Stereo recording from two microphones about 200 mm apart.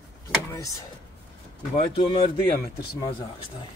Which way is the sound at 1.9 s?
25° left (ahead or behind).